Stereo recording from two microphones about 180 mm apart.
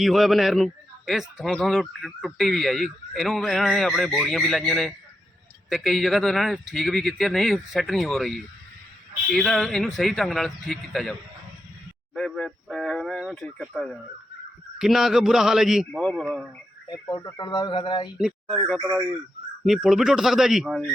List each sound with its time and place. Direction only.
0.0 s speech: centre (ahead or behind)
12.1 s speech: centre (ahead or behind)
16.9 s speech: 20° left (ahead or behind)
18.2 s speech: centre (ahead or behind)
19.6 s speech: 5° right (ahead or behind)